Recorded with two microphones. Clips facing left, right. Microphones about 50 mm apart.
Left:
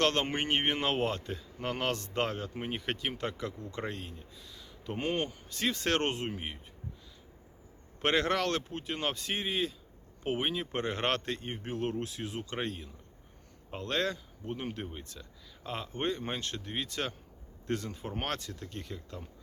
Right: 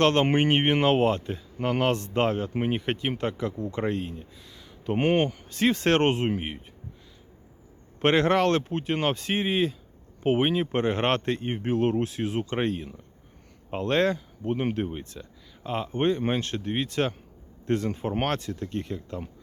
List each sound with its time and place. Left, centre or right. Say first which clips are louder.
0.0 s speech: right 8 dB; right
4.9 s speech: right 10 dB; right
5.5 s speech: right 7 dB; right
8.0 s speech: right 8 dB; right